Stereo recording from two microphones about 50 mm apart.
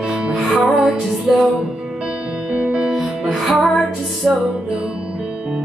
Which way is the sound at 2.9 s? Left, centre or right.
Centre.